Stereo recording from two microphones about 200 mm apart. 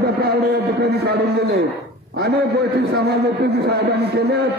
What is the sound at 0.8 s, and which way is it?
A man's voice, 55° right (ahead or behind).